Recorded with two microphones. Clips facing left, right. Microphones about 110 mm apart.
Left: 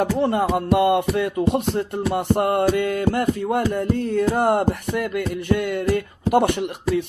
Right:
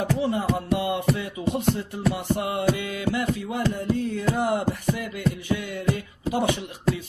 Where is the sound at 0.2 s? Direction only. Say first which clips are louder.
Left 5 dB; 60° left (ahead or behind).